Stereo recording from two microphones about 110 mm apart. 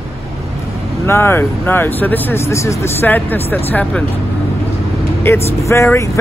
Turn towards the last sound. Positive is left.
turn(degrees=25)  # may be behind; listen again after turning